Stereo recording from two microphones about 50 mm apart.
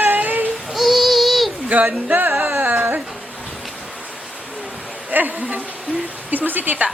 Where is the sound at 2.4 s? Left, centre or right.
Right.